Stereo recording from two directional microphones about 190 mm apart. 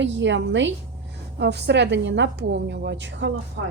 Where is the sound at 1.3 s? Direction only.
60° right (ahead or behind).